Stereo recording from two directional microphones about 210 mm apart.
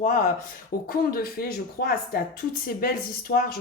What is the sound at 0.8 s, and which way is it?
A woman's voice, 45° left (ahead or behind).